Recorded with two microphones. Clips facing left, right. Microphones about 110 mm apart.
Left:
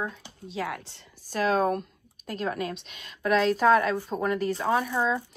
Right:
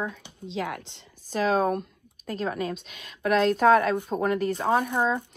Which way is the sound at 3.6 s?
50° right (ahead or behind).